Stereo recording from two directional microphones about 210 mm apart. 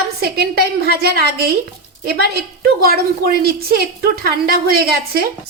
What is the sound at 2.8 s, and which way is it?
Speech, 45° right (ahead or behind).